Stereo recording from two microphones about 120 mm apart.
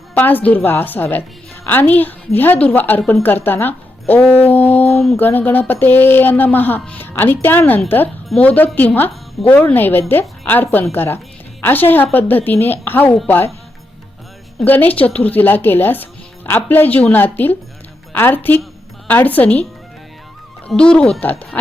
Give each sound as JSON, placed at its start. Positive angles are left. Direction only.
{"t": 0.1, "sound": "a woman's voice", "side_deg": 15}
{"t": 14.6, "sound": "a woman's voice", "side_deg": 15}
{"t": 20.7, "sound": "a woman's voice", "side_deg": 5}